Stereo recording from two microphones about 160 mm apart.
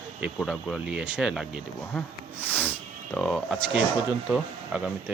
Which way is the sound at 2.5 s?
10° left (ahead or behind).